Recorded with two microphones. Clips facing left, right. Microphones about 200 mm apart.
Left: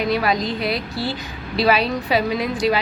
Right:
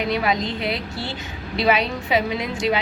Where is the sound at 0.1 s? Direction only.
20° right (ahead or behind).